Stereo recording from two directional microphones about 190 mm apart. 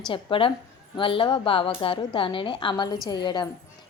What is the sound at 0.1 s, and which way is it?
A woman's voice, 25° left (ahead or behind).